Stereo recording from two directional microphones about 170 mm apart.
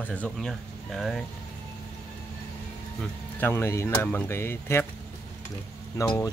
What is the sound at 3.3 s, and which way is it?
Speech, 15° left (ahead or behind).